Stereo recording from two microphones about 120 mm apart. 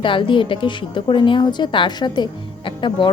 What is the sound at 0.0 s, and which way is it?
A woman's voice, 45° left (ahead or behind).